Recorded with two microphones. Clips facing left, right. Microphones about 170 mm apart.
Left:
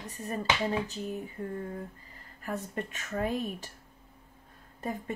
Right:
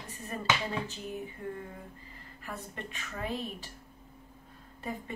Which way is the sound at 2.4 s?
45° left (ahead or behind).